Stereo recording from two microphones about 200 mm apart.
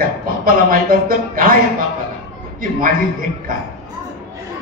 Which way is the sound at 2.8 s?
45° right (ahead or behind).